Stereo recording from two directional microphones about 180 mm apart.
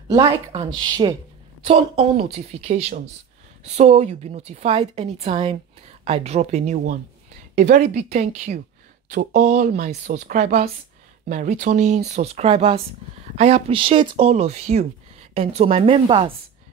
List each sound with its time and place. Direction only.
0.5 s a woman's voice: 30° right (ahead or behind)